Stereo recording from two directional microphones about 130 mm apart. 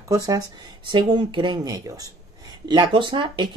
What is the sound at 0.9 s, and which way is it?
Speech, 40° right (ahead or behind).